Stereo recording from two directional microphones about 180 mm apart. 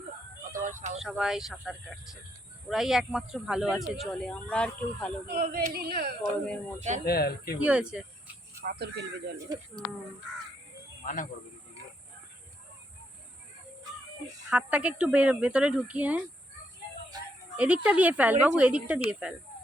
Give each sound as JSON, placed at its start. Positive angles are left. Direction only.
{"t": 0.5, "sound": "a sound", "side_deg": -45}
{"t": 0.9, "sound": "speech", "side_deg": -5}
{"t": 5.3, "sound": "speech", "side_deg": -55}
{"t": 6.7, "sound": "speech", "side_deg": -40}
{"t": 7.0, "sound": "speech", "side_deg": 60}
{"t": 7.6, "sound": "speech", "side_deg": -5}
{"t": 8.6, "sound": "speech", "side_deg": -70}
{"t": 11.0, "sound": "speech", "side_deg": 45}
{"t": 14.5, "sound": "speech", "side_deg": -5}
{"t": 17.8, "sound": "speech", "side_deg": -10}